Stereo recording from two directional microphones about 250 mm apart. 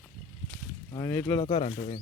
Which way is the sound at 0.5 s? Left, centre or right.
Centre.